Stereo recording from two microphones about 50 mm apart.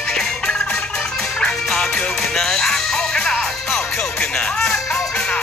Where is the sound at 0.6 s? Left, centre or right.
Left.